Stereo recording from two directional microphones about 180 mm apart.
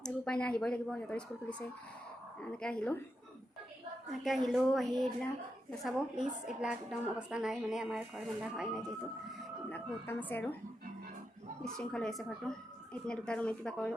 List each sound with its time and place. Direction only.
0.0 s a woman's voice: 5° left (ahead or behind)
4.2 s a woman's voice: centre (ahead or behind)
9.6 s speech: 10° left (ahead or behind)
11.6 s a woman's voice: 5° left (ahead or behind)